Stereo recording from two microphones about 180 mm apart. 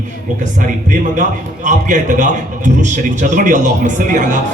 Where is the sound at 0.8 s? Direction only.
45° right (ahead or behind).